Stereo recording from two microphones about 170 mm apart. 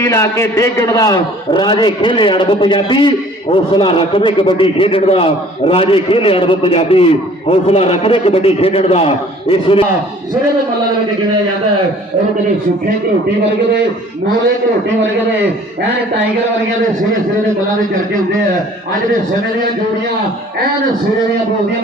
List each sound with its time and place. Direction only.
0.0 s a man's voice: 15° left (ahead or behind); by 9.8 s 30° left (ahead or behind)